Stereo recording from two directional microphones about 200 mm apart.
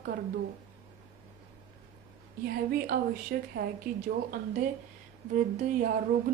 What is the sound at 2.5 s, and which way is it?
A woman's voice, 50° right (ahead or behind).